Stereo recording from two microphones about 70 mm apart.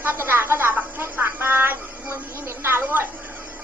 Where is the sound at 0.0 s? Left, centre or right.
Right.